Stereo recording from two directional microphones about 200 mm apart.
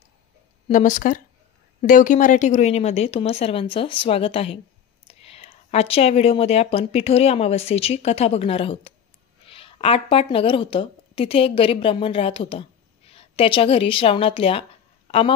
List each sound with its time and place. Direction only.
0.7 s a woman's voice: 40° left (ahead or behind)